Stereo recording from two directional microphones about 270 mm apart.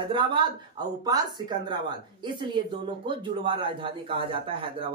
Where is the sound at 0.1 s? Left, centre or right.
Centre.